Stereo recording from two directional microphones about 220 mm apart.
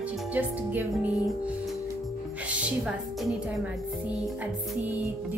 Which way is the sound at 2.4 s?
5° right (ahead or behind).